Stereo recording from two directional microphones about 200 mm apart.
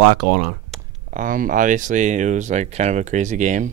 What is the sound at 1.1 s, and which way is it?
Speech, 40° right (ahead or behind).